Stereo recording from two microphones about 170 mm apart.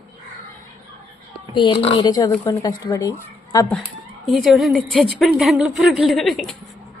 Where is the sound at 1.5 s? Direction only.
30° left (ahead or behind).